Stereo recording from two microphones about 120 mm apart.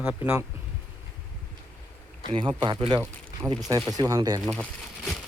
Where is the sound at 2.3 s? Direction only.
45° right (ahead or behind); by 4.4 s 30° right (ahead or behind).